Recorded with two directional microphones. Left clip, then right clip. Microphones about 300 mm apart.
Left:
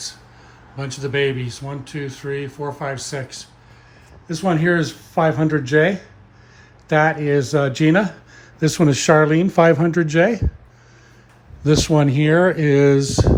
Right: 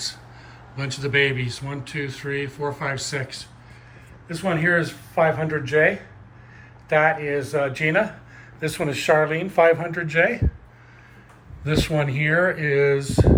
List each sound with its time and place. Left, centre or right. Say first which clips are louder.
0.8 s speech: even; centre
11.6 s speech: left 6 dB; centre